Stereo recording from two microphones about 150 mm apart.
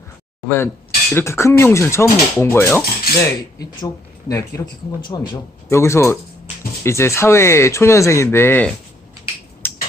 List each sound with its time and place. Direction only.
0.4 s speech: 15° left (ahead or behind)
9.6 s finger snapping: 15° left (ahead or behind)